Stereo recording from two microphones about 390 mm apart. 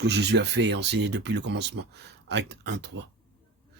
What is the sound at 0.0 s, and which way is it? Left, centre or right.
Speech, right.